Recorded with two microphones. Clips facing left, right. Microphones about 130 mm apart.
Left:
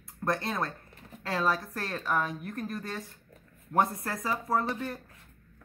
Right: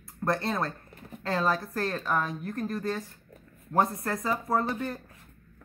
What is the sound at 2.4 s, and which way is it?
Speech, 25° right (ahead or behind).